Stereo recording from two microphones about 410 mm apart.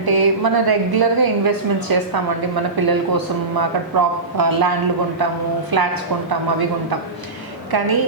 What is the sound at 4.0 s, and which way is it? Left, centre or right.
A woman's voice, right.